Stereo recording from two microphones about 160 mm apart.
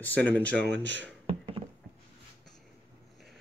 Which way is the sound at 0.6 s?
90° right.